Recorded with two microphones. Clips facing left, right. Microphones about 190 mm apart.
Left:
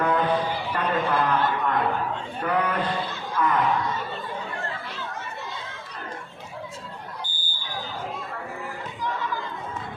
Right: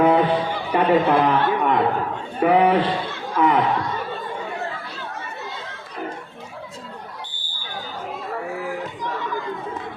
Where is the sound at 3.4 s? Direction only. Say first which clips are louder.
Right 5 dB; 80° right.